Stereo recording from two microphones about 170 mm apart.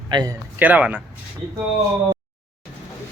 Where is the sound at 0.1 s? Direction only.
25° right (ahead or behind).